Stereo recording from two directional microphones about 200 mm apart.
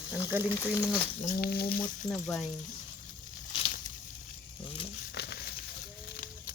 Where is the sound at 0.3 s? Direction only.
10° right (ahead or behind).